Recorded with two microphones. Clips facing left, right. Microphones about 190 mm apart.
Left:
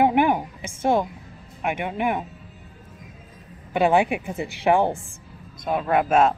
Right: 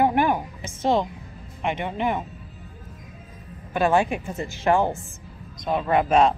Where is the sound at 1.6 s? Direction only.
10° left (ahead or behind).